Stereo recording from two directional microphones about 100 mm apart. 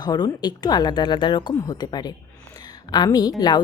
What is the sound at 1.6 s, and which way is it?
Speech, 40° left (ahead or behind).